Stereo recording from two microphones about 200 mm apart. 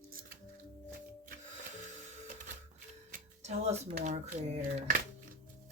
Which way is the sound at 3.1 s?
35° right (ahead or behind).